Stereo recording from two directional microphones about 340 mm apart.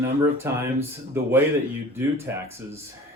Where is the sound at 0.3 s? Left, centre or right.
Centre.